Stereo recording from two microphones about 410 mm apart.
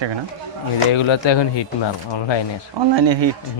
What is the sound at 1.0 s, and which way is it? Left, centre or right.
Speech, left.